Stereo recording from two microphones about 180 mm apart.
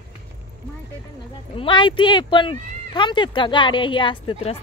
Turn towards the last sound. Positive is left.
turn(degrees=30)  # may be behind; listen again after turning